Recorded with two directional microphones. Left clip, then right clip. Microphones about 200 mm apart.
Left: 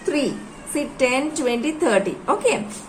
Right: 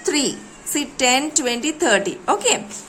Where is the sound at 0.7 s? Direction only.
35° right (ahead or behind).